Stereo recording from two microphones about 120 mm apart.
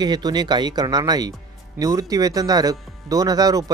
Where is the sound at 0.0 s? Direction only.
35° right (ahead or behind).